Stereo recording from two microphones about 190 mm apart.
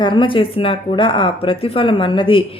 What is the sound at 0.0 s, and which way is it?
Speech, 25° left (ahead or behind).